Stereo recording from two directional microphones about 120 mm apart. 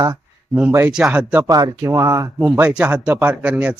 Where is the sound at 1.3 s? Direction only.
25° right (ahead or behind).